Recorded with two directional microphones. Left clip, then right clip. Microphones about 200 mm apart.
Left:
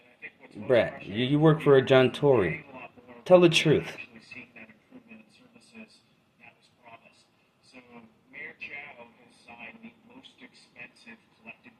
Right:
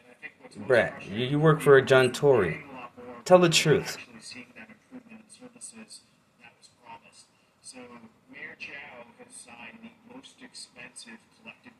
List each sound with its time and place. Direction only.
0.7 s speech: 25° left (ahead or behind)